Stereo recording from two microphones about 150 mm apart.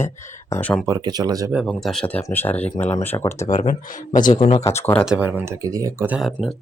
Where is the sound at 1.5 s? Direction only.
5° right (ahead or behind).